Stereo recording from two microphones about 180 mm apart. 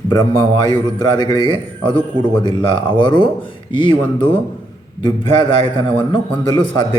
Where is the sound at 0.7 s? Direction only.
25° left (ahead or behind).